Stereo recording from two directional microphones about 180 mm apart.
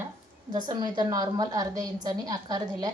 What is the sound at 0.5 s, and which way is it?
A woman's voice, 25° right (ahead or behind).